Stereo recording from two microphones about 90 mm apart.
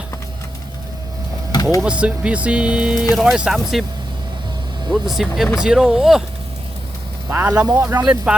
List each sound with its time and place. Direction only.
1.8 s speech: 15° right (ahead or behind)
4.9 s speech: centre (ahead or behind)
7.3 s speech: 20° right (ahead or behind)
8.0 s speech: 10° right (ahead or behind)